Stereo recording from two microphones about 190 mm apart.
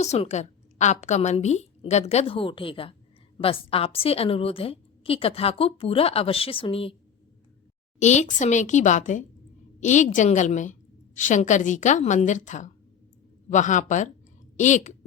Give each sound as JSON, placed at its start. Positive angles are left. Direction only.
{"t": 0.0, "sound": "a woman's voice", "side_deg": 35}
{"t": 7.9, "sound": "a woman's voice", "side_deg": 40}